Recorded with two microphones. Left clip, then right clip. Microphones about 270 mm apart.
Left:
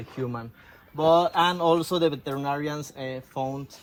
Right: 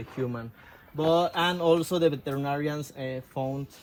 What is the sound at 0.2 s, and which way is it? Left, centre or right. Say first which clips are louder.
Speech: left 1 dB; left.